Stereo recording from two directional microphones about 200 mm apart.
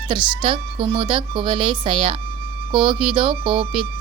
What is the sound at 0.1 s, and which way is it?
Speech, 25° right (ahead or behind).